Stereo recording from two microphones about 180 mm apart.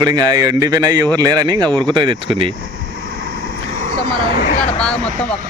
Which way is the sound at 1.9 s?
25° right (ahead or behind).